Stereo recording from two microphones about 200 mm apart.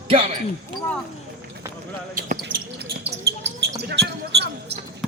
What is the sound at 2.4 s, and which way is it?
Basketball bounce, 55° right (ahead or behind).